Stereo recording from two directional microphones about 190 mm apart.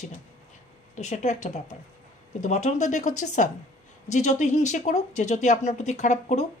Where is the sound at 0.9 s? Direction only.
40° left (ahead or behind).